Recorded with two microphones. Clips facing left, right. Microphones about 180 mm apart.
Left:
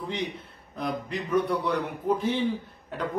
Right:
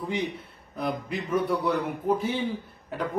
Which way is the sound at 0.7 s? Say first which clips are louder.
Right 1 dB; 5° right (ahead or behind).